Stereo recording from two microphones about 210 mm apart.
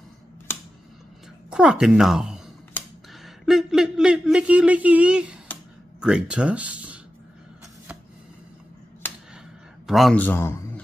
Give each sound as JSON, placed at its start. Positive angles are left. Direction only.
{"t": 1.5, "sound": "speech", "side_deg": -5}
{"t": 9.8, "sound": "a man's voice", "side_deg": 0}